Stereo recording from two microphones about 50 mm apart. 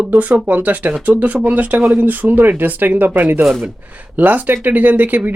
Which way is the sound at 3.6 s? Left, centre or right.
Right.